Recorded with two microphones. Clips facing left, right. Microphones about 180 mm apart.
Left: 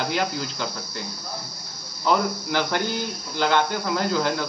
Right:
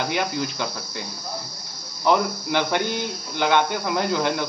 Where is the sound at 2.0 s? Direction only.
20° right (ahead or behind).